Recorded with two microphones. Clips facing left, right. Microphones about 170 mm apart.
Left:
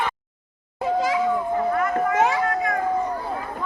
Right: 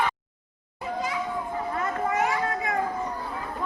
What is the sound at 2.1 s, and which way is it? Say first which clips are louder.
Children playing: left 4 dB; 90° left.